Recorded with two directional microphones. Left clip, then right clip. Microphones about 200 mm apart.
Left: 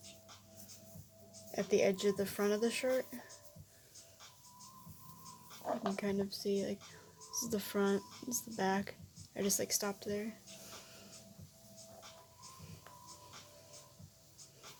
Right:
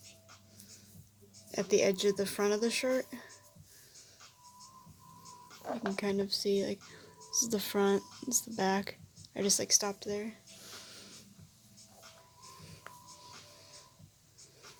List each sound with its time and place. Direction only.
1.5 s speech: 30° right (ahead or behind)
6.0 s speech: 30° right (ahead or behind)
10.8 s a sound: 30° right (ahead or behind)